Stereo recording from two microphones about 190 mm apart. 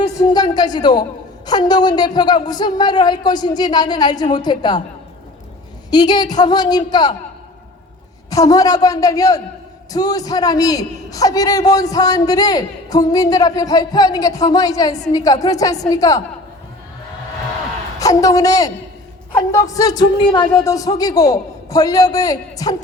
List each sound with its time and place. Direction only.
0.3 s a man's voice: 20° left (ahead or behind)
5.9 s a man's voice: 20° left (ahead or behind)
8.3 s a man's voice: 20° left (ahead or behind)
18.0 s a man's voice: 20° left (ahead or behind)